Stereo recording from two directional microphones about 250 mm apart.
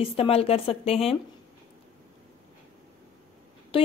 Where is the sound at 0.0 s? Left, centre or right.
Left.